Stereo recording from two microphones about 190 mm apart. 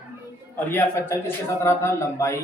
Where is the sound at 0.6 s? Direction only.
10° left (ahead or behind).